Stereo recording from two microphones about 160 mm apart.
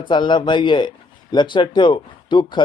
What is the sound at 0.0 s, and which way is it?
Speech, 30° left (ahead or behind).